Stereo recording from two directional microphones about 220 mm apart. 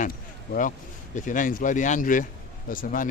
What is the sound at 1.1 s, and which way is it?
Speech, 35° left (ahead or behind).